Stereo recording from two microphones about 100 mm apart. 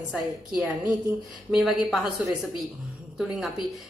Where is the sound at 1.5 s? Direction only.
5° right (ahead or behind).